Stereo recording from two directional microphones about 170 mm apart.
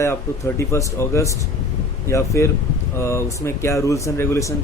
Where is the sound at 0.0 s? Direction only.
15° left (ahead or behind).